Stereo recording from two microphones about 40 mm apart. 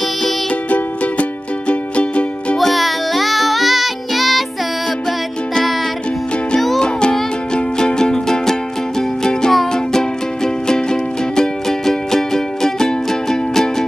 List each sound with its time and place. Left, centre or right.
0.7 s music: left
2.5 s music: centre
6.8 s music: left